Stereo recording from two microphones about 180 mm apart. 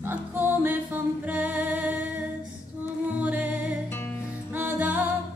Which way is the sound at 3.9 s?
10° left (ahead or behind).